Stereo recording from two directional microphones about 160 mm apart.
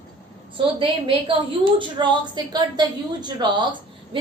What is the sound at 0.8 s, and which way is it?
A woman's voice, 35° right (ahead or behind).